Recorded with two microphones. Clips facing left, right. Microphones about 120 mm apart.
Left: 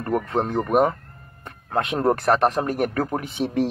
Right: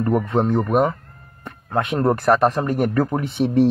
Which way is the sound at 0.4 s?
Centre (ahead or behind).